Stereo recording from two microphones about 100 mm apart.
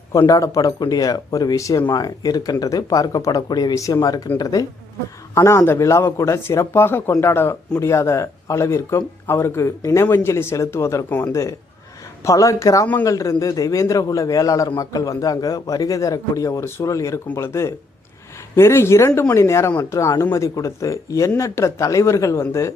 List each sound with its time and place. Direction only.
0.3 s a man's voice: 35° left (ahead or behind)